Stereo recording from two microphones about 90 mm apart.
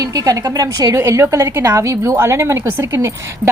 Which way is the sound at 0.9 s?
30° right (ahead or behind).